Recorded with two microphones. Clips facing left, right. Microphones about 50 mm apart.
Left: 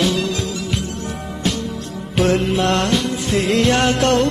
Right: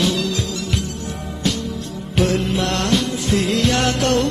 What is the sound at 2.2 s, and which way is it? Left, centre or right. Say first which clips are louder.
Music: left 4 dB; left.